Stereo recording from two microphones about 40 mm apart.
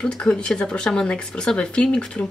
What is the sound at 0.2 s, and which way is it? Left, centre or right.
Speech, left.